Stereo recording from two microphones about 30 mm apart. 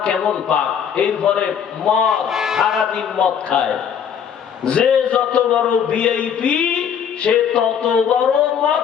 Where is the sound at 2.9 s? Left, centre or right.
Left.